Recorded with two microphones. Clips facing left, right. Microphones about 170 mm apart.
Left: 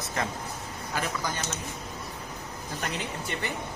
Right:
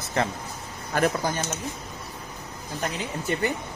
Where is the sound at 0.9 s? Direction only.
55° right (ahead or behind).